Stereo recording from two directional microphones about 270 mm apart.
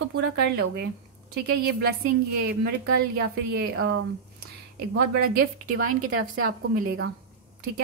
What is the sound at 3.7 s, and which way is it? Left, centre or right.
Speech, right.